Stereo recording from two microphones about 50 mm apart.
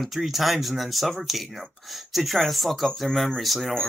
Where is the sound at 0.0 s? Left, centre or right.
Centre.